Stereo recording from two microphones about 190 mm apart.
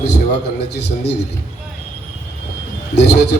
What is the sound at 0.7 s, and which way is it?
Speech, 60° left (ahead or behind).